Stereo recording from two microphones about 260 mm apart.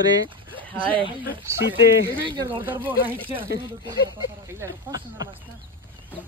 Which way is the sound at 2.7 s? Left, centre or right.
Centre.